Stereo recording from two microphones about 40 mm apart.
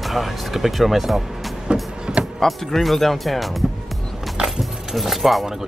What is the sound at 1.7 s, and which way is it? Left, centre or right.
Music, right.